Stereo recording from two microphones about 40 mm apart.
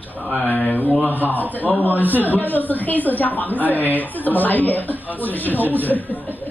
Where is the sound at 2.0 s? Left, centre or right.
Right.